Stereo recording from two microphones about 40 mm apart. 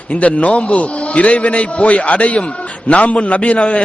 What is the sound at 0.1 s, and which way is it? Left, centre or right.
A man's voice, left.